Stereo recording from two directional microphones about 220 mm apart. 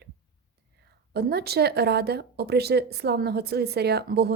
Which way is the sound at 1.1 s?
45° right (ahead or behind).